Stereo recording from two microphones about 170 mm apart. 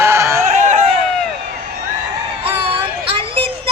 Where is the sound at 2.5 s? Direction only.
30° right (ahead or behind).